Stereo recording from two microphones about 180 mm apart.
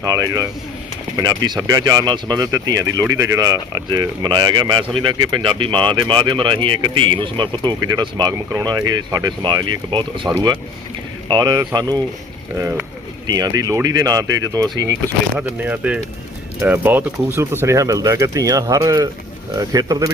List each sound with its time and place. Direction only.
0.0 s speech: 20° right (ahead or behind)
13.2 s speech: 20° right (ahead or behind)
15.4 s speech: 10° right (ahead or behind)